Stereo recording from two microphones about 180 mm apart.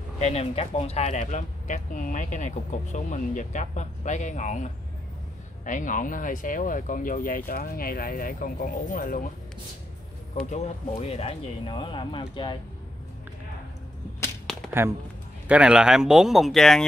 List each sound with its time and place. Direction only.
0.2 s speech: 35° left (ahead or behind); by 9.3 s 50° left (ahead or behind)
10.4 s speech: 35° left (ahead or behind)
14.7 s speech: 15° right (ahead or behind)